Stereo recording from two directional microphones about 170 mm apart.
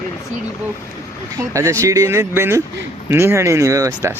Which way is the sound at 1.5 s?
20° right (ahead or behind).